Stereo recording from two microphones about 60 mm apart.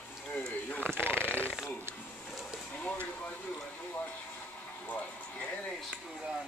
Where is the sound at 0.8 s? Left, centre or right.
Right.